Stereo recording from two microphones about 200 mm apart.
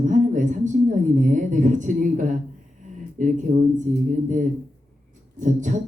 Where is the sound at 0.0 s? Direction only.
40° right (ahead or behind).